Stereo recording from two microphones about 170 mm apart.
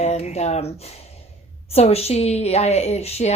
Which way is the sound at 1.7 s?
35° left (ahead or behind).